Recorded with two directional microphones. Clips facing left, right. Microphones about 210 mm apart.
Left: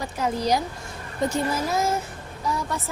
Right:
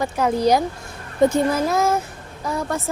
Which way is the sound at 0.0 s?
55° right (ahead or behind).